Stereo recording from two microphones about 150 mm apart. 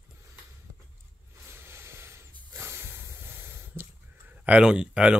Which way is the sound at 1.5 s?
15° right (ahead or behind).